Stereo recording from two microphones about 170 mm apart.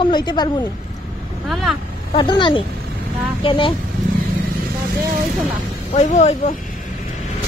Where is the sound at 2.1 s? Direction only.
25° left (ahead or behind).